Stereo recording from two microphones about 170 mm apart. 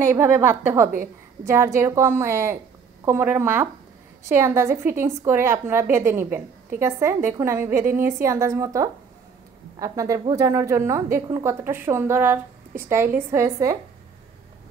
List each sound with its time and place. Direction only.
0.0 s a woman's voice: 15° right (ahead or behind)